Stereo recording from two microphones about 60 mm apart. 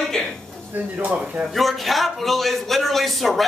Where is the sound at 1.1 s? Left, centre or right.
Centre.